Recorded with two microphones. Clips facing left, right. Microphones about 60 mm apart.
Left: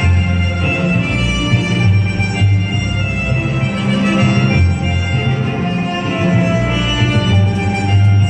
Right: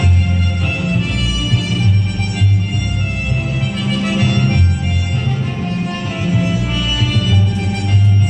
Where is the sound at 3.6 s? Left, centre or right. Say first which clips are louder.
Left 4 dB; left.